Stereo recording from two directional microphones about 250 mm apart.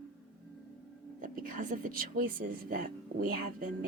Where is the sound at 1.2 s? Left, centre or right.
Right.